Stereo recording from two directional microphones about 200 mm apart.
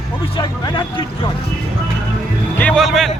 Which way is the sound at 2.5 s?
5° left (ahead or behind).